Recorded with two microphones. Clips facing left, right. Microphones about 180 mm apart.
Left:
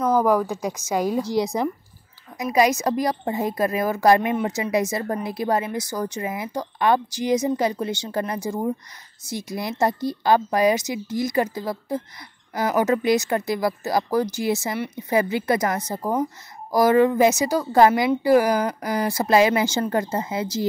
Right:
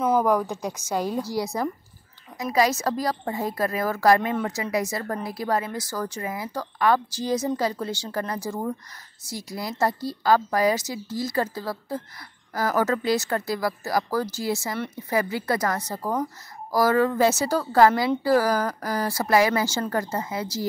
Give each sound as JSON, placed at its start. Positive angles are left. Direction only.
{"t": 0.2, "sound": "a woman's voice", "side_deg": 5}